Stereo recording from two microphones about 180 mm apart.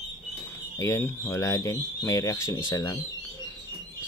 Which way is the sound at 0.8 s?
15° left (ahead or behind).